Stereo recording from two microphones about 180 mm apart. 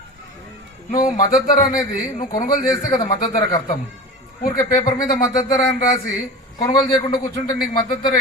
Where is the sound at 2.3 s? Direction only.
50° left (ahead or behind).